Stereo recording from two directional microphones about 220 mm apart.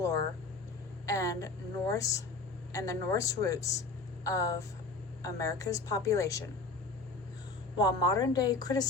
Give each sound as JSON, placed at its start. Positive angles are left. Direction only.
{"t": 0.0, "sound": "a woman's voice", "side_deg": 15}
{"t": 7.8, "sound": "a woman's voice", "side_deg": 20}